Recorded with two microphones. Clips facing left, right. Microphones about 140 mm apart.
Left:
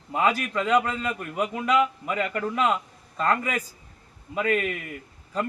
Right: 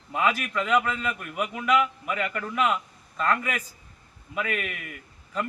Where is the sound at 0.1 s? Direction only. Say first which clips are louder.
Left 2 dB; 35° left (ahead or behind).